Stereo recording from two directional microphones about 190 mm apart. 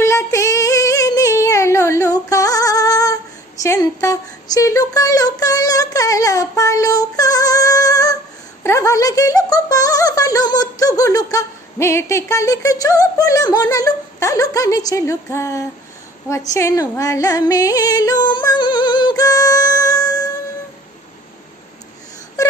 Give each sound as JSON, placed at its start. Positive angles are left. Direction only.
{"t": 0.0, "sound": "female singing", "side_deg": 15}
{"t": 3.6, "sound": "speech", "side_deg": 15}
{"t": 16.5, "sound": "yodeling", "side_deg": 15}